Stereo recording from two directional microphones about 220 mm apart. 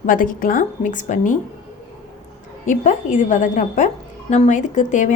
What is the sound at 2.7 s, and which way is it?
A woman's voice, 35° left (ahead or behind).